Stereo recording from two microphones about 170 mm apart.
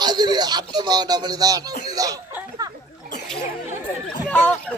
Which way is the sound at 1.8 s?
20° right (ahead or behind).